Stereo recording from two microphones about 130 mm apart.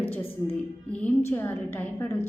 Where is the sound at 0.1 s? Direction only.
10° left (ahead or behind).